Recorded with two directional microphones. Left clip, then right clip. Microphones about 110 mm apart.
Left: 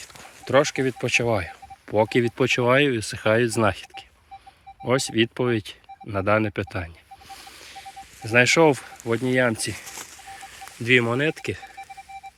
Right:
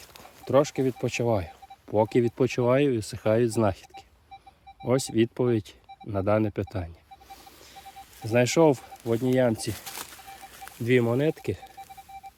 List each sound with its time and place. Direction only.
0.0 s speech: 15° right (ahead or behind)
8.2 s speech: 25° right (ahead or behind)
9.1 s speech: 30° right (ahead or behind)
10.8 s speech: 25° right (ahead or behind)